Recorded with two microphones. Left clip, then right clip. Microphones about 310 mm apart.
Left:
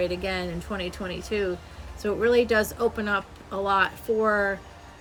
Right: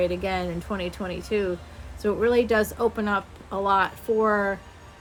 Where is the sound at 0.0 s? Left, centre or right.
Centre.